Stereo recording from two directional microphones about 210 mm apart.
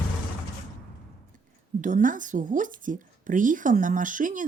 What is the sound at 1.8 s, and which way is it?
Speech, 35° right (ahead or behind).